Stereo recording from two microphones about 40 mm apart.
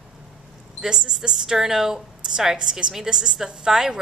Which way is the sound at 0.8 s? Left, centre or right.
Centre.